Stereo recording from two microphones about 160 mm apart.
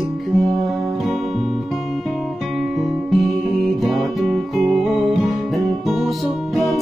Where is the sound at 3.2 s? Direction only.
Centre (ahead or behind).